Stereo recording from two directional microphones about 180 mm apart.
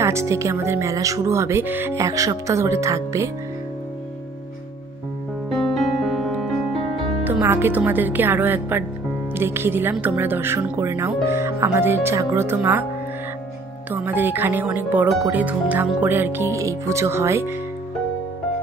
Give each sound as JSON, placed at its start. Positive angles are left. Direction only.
{"t": 0.0, "sound": "speech", "side_deg": -15}
{"t": 5.6, "sound": "music", "side_deg": 0}
{"t": 7.2, "sound": "speech", "side_deg": -10}
{"t": 13.8, "sound": "speech", "side_deg": -10}